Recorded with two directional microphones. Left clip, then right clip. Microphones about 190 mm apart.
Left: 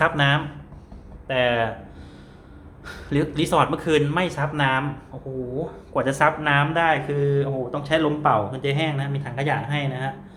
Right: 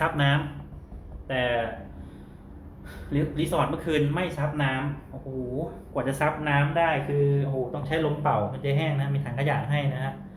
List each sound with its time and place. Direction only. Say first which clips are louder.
0.0 s speech: left 5 dB; 25° left (ahead or behind)
3.1 s speech: left 6 dB; 40° left (ahead or behind)
3.8 s speech: left 5 dB; 30° left (ahead or behind)
5.9 s speech: left 7 dB; 35° left (ahead or behind)